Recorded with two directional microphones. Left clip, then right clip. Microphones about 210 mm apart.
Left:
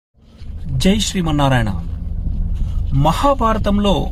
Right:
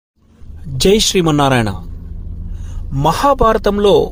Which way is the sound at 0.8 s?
45° right (ahead or behind).